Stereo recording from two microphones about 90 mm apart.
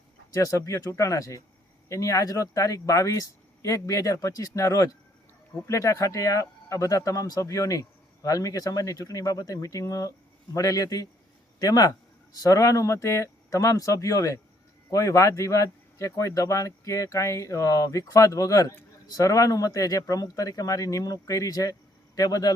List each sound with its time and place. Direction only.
0.3 s a man's voice: 40° left (ahead or behind)